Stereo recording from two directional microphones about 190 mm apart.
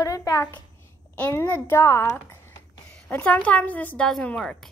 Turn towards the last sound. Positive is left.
turn(degrees=5)  # may be behind; listen again after turning